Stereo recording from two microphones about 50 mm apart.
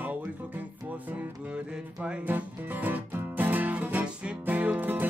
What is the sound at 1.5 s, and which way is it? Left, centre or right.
Music, right.